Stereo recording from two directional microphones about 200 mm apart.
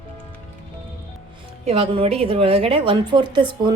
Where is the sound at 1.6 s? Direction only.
30° right (ahead or behind).